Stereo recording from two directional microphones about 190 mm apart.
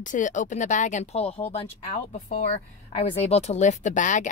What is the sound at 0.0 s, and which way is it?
Speech, 40° left (ahead or behind).